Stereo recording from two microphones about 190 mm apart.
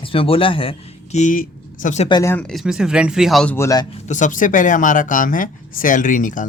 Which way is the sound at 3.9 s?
35° left (ahead or behind).